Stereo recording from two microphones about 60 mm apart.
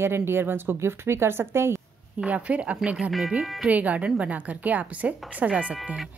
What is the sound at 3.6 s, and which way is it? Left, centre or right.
A woman's voice, right.